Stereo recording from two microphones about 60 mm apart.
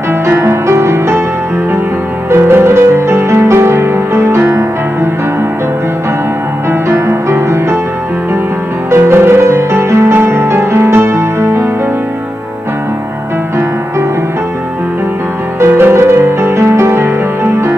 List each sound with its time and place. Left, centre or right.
0.3 s music: right
2.3 s music: right
7.1 s music: right
8.9 s music: right
15.6 s music: right